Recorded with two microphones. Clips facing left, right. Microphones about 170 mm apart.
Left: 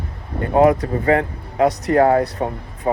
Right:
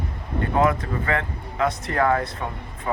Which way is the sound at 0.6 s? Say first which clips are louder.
Left 8 dB; 35° left (ahead or behind).